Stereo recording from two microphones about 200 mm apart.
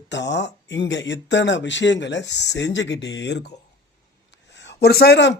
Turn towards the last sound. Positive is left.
turn(degrees=55)  # may be behind; listen again after turning